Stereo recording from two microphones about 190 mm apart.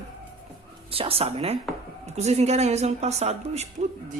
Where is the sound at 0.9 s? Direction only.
30° right (ahead or behind).